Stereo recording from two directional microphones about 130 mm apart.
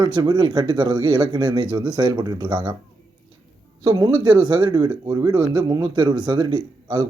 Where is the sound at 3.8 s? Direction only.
30° right (ahead or behind).